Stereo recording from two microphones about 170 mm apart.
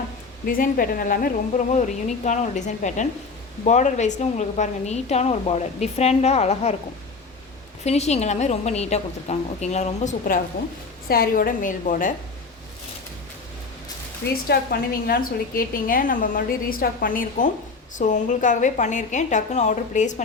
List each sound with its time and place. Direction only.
0.4 s a woman's voice: 55° left (ahead or behind); by 6.7 s 40° left (ahead or behind)
7.9 s a woman's voice: 40° left (ahead or behind)
14.4 s a woman's voice: 65° left (ahead or behind); by 20.2 s 45° left (ahead or behind)